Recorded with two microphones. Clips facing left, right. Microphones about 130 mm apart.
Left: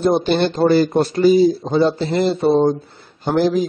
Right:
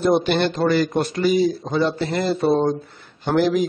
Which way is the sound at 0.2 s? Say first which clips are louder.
Left 4 dB; 30° left (ahead or behind).